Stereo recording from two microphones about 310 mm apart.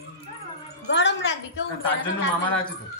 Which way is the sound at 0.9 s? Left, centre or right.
Left.